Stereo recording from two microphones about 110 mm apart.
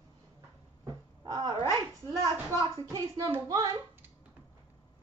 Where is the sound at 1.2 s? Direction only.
35° right (ahead or behind).